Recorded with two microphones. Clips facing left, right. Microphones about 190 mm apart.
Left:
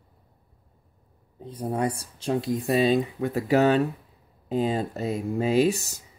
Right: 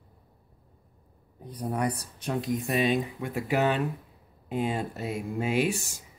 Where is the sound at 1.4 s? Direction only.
25° left (ahead or behind).